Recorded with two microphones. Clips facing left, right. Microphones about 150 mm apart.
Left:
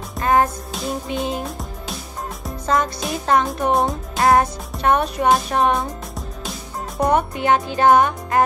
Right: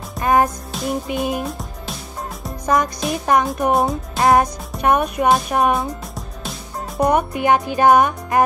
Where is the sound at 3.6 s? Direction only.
Centre (ahead or behind).